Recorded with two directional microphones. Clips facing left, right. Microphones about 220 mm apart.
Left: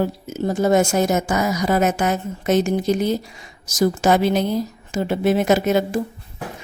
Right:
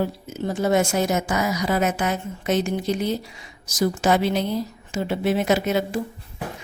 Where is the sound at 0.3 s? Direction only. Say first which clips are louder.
Left 5 dB; 40° left (ahead or behind).